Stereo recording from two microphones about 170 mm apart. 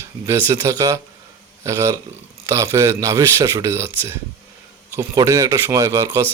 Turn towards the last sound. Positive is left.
turn(degrees=-15)  # may be behind; listen again after turning